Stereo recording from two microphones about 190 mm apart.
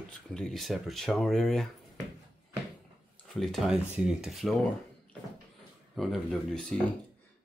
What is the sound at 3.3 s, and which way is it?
Speech, centre (ahead or behind).